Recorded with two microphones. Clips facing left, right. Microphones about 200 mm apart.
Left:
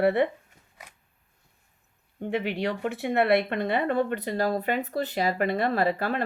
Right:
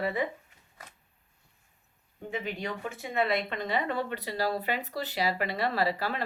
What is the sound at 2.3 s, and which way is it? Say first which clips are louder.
Speech: left 7 dB; 70° left (ahead or behind).